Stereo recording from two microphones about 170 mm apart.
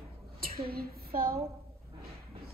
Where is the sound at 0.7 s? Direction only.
65° right (ahead or behind).